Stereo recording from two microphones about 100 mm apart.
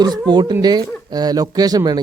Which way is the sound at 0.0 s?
45° right (ahead or behind).